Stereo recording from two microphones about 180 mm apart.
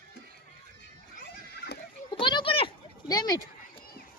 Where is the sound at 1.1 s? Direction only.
60° left (ahead or behind).